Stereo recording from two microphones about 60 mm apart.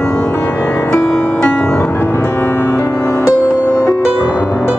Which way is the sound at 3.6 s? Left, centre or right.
Left.